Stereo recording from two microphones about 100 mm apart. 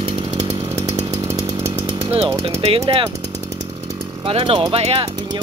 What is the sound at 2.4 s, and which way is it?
Speech, 65° right (ahead or behind).